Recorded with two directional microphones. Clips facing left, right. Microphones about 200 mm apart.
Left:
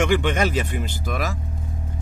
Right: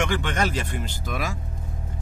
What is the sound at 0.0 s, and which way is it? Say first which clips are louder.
Speech: left 5 dB; 15° left (ahead or behind).